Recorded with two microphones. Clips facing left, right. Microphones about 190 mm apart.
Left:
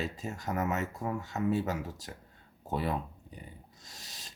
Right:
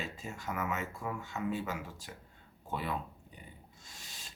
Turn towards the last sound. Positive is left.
turn(degrees=40)  # may be behind; listen again after turning